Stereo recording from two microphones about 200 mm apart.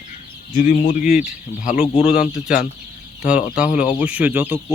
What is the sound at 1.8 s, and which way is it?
Speech, 5° right (ahead or behind).